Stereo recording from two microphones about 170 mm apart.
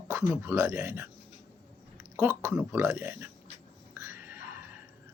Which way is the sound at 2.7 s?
15° right (ahead or behind).